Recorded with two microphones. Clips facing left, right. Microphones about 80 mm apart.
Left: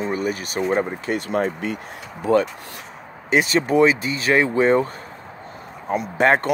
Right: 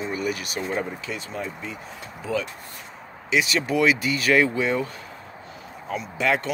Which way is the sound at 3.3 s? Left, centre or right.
Left.